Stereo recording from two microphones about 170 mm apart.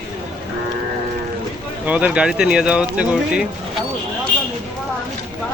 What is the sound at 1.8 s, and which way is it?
Speech, 10° right (ahead or behind).